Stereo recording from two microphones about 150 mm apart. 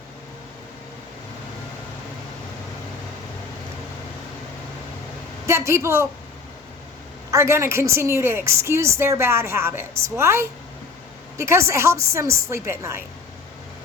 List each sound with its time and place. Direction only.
5.5 s a woman's voice: 20° right (ahead or behind)
7.3 s a woman's voice: 20° right (ahead or behind)